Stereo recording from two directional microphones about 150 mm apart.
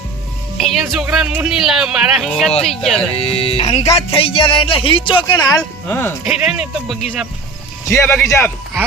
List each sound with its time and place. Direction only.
0.5 s speech: centre (ahead or behind)
3.2 s speech: 40° left (ahead or behind)
5.9 s speech: 15° left (ahead or behind)
6.2 s speech: 5° right (ahead or behind)
7.9 s speech: 15° left (ahead or behind)